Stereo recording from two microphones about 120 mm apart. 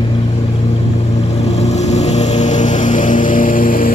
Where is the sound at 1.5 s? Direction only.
65° left (ahead or behind); by 3.5 s 90° left.